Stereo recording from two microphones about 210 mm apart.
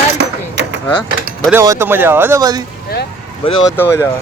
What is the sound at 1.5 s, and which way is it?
Speech, 15° right (ahead or behind).